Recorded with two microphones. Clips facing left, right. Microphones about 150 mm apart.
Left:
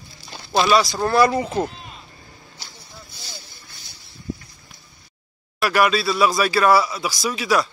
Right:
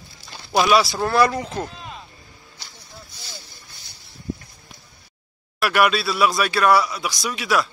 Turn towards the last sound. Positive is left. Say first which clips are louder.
# left 2 dB
turn(degrees=0)  # may be behind; listen again after turning